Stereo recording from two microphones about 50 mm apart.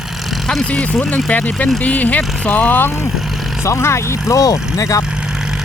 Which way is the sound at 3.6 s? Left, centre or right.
Left.